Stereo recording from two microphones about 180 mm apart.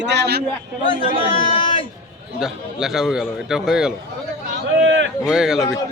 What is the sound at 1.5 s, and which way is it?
Speech, 30° left (ahead or behind).